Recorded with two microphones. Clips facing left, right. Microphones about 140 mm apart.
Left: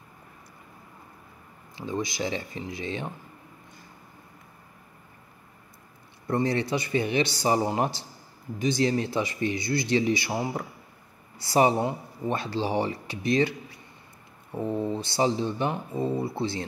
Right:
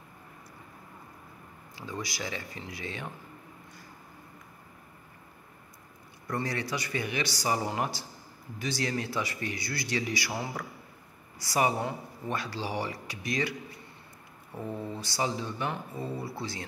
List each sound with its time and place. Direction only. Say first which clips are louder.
1.8 s speech: left 7 dB; 20° left (ahead or behind)
6.2 s speech: left 7 dB; 25° left (ahead or behind)